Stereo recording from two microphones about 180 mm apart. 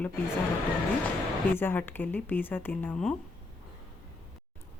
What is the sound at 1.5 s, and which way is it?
Speech, 10° left (ahead or behind).